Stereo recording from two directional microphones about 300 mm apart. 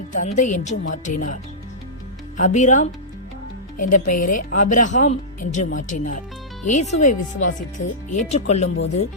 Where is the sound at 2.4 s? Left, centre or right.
Left.